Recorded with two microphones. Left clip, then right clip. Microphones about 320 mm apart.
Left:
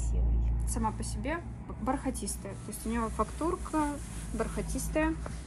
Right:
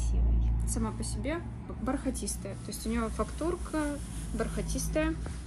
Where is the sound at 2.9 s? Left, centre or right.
Centre.